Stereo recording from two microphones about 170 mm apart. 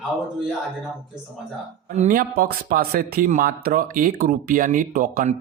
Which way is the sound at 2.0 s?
55° right (ahead or behind).